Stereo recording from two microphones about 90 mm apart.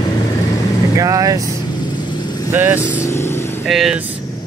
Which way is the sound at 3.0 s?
30° left (ahead or behind).